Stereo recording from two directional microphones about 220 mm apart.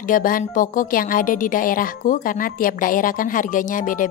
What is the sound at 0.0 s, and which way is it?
A woman's voice, 40° left (ahead or behind).